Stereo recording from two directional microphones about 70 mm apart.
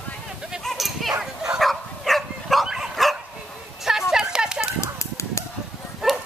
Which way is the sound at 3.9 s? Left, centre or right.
Centre.